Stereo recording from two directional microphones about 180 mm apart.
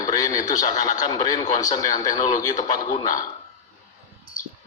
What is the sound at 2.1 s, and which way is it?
A man's voice, 40° left (ahead or behind).